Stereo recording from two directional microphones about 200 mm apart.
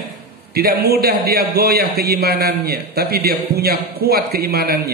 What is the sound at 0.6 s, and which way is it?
A man's voice, 50° right (ahead or behind).